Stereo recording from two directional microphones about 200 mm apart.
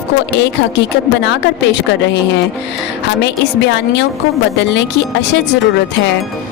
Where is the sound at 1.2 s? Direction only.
60° left (ahead or behind).